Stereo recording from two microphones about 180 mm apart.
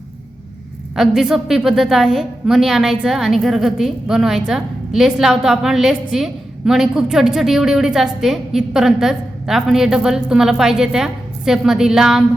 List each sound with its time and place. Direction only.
0.9 s a woman's voice: 5° right (ahead or behind)